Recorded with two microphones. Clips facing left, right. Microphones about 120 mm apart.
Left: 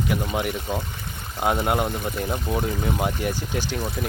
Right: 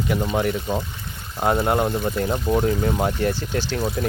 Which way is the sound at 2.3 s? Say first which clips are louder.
Right 5 dB; 15° right (ahead or behind).